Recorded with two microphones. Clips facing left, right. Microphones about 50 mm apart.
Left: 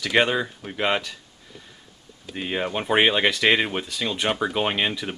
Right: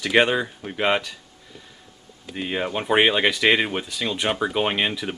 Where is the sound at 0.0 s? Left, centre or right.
Centre.